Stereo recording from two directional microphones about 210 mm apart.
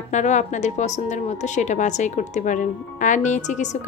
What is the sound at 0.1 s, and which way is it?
A woman's voice, 35° left (ahead or behind).